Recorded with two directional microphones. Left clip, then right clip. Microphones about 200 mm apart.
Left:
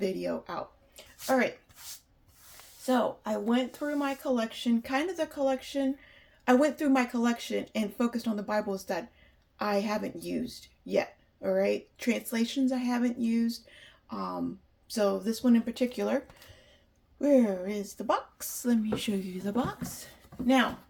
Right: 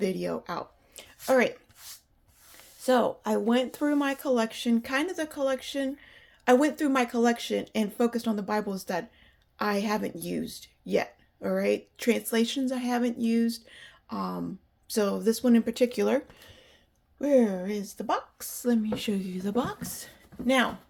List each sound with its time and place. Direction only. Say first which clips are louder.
0.0 s speech: right 2 dB; 40° right (ahead or behind)
2.8 s speech: right 4 dB; 55° right (ahead or behind); by 18.4 s 35° right (ahead or behind)
18.6 s speech: right 2 dB; 20° right (ahead or behind)